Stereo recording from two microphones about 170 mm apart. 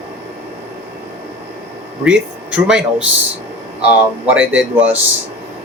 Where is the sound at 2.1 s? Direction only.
5° right (ahead or behind).